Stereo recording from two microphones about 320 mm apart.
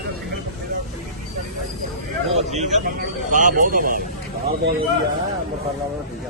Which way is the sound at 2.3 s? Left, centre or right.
Right.